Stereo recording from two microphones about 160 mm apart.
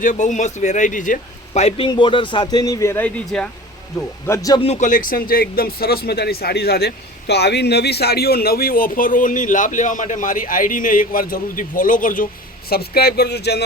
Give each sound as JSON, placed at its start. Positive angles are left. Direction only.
{"t": 0.0, "sound": "speech", "side_deg": 50}
{"t": 4.3, "sound": "a man's voice", "side_deg": 20}
{"t": 4.6, "sound": "speech", "side_deg": 45}